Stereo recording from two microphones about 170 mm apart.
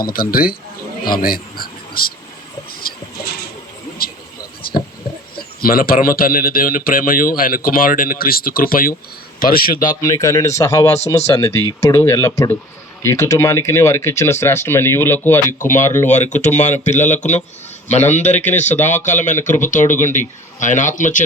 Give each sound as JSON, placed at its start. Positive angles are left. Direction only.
{"t": 0.0, "sound": "speech", "side_deg": 60}
{"t": 1.0, "sound": "a sound", "side_deg": 60}
{"t": 2.8, "sound": "bird", "side_deg": 60}
{"t": 5.6, "sound": "speech", "side_deg": 60}
{"t": 9.9, "sound": "speech", "side_deg": 20}
{"t": 15.4, "sound": "a man's voice", "side_deg": 50}